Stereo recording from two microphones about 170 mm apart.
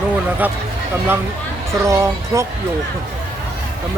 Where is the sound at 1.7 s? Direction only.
15° right (ahead or behind).